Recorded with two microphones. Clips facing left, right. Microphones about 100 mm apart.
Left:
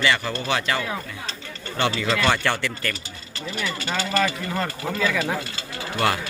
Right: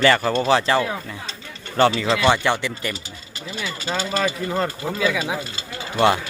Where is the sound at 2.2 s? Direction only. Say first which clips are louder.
Right 5 dB; 20° right (ahead or behind).